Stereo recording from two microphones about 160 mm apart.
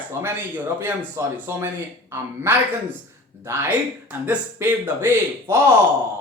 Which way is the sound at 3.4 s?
15° right (ahead or behind).